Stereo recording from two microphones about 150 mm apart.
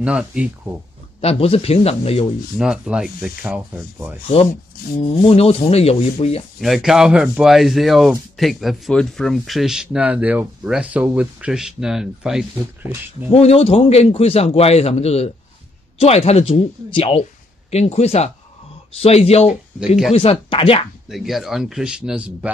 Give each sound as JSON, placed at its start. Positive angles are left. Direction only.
{"t": 0.0, "sound": "speech", "side_deg": -5}
{"t": 1.2, "sound": "speech", "side_deg": 40}
{"t": 2.5, "sound": "speech", "side_deg": -5}
{"t": 4.8, "sound": "speech", "side_deg": 70}
{"t": 5.2, "sound": "a man's voice", "side_deg": 40}
{"t": 6.6, "sound": "speech", "side_deg": 0}
{"t": 13.3, "sound": "a man's voice", "side_deg": 40}
{"t": 21.1, "sound": "speech", "side_deg": 0}